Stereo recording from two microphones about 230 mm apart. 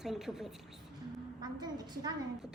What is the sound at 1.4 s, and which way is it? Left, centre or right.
Speech, centre.